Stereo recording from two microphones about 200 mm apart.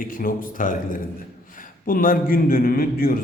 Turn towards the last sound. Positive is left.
turn(degrees=50)  # may be behind; listen again after turning